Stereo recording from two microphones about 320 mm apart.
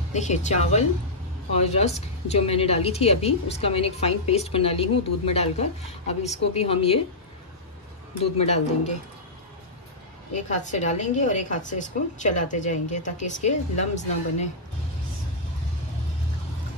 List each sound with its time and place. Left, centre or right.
0.1 s a woman's voice: left
8.4 s a woman's voice: centre
10.3 s a woman's voice: left